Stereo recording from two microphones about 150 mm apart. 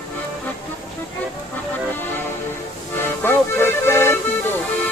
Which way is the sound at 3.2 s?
15° left (ahead or behind).